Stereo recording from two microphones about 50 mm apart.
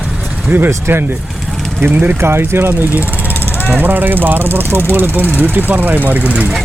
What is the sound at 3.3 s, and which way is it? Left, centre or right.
Vehicle, left.